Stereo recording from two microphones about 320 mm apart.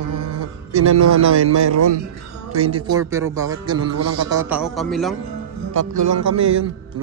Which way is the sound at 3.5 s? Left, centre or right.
Right.